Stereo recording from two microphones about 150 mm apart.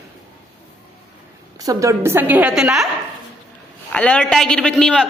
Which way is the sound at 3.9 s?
10° left (ahead or behind).